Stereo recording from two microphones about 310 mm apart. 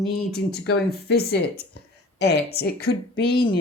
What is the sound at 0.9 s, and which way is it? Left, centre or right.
A woman's voice, left.